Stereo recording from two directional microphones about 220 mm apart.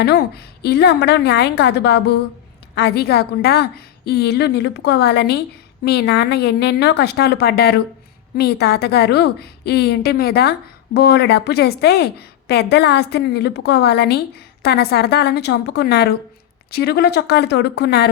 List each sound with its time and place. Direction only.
0.0 s a woman's voice: 45° left (ahead or behind)